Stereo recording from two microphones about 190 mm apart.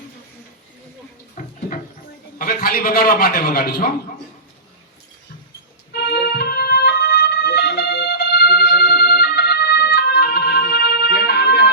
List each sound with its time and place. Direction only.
1.4 s a sound: 45° left (ahead or behind)
2.4 s a man's voice: 50° left (ahead or behind)
5.9 s organ: 60° left (ahead or behind)